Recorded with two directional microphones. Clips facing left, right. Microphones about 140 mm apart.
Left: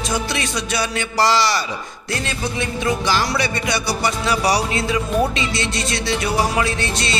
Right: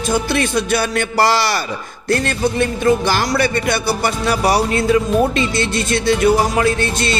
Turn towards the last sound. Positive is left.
turn(degrees=-50)  # may be behind; listen again after turning